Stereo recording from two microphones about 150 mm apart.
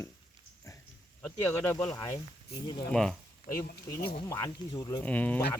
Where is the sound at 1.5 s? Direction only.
15° left (ahead or behind).